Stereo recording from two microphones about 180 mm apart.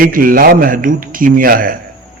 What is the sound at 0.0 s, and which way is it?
Speech, 50° right (ahead or behind).